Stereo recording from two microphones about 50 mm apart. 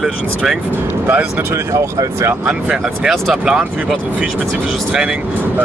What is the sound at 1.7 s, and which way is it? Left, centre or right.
Speech, right.